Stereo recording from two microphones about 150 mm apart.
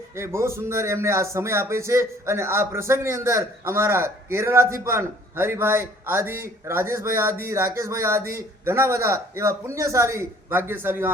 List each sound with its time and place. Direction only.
0.2 s speech: 15° right (ahead or behind)